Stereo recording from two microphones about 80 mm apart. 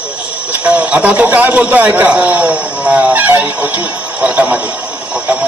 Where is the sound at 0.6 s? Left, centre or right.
Centre.